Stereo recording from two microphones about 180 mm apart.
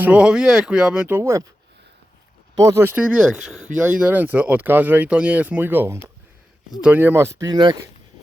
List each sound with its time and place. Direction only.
0.0 s speech: 5° right (ahead or behind)
2.6 s speech: 15° right (ahead or behind)